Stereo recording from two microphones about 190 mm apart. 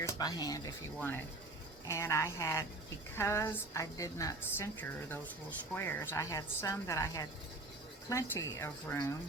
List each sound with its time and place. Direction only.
0.0 s speech: 20° left (ahead or behind)